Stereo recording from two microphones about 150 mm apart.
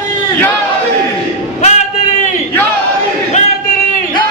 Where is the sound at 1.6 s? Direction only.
50° left (ahead or behind).